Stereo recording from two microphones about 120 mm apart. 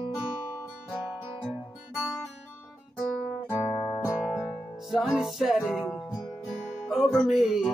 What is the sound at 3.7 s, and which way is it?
Music, 25° left (ahead or behind).